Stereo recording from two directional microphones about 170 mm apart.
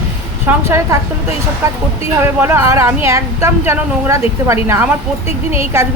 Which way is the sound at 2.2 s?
15° right (ahead or behind).